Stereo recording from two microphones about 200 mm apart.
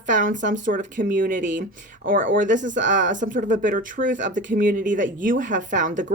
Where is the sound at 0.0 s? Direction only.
40° right (ahead or behind).